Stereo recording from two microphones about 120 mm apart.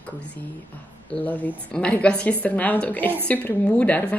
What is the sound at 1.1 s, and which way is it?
A woman's voice, 15° left (ahead or behind).